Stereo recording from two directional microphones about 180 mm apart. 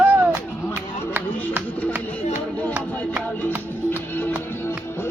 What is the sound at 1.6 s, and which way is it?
Music, 10° left (ahead or behind).